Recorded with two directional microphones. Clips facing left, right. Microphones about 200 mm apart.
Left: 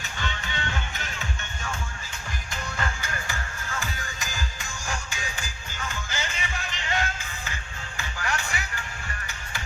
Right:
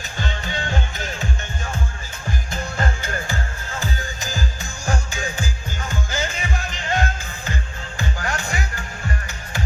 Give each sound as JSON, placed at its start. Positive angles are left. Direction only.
{"t": 0.2, "sound": "music", "side_deg": -35}